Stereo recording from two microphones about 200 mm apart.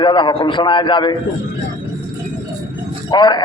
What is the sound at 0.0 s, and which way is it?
A man's voice, 25° left (ahead or behind).